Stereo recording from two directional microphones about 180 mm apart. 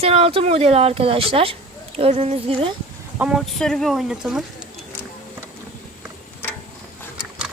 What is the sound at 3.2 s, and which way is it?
Speech, 5° right (ahead or behind).